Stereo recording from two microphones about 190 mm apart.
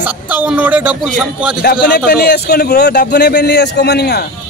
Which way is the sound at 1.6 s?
55° left (ahead or behind).